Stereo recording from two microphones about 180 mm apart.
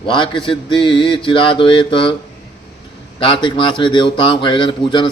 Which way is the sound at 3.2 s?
25° left (ahead or behind).